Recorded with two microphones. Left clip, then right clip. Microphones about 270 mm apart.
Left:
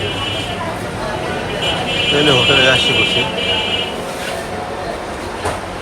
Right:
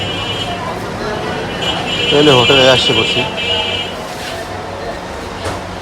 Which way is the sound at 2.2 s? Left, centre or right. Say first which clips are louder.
Right 3 dB; centre.